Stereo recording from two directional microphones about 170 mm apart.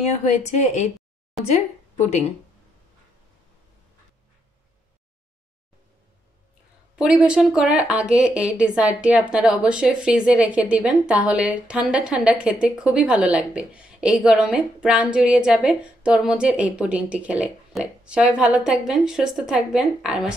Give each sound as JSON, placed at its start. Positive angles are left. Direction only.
{"t": 0.0, "sound": "speech", "side_deg": 40}
{"t": 7.0, "sound": "a woman's voice", "side_deg": -5}